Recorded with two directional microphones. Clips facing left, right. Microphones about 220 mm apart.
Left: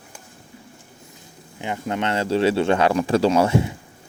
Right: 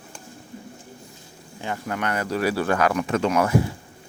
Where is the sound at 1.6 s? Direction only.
20° left (ahead or behind).